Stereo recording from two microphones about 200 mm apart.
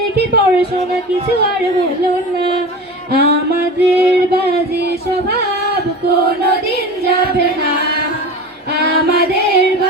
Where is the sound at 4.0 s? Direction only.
50° right (ahead or behind).